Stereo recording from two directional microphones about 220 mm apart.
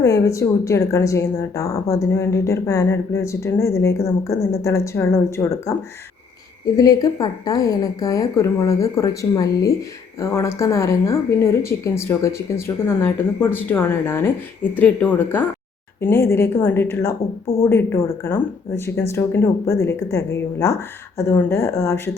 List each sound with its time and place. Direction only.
0.0 s a woman's voice: 15° left (ahead or behind)
6.7 s a woman's voice: 15° left (ahead or behind)